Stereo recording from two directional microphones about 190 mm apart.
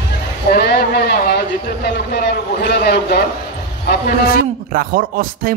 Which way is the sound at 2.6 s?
60° left (ahead or behind).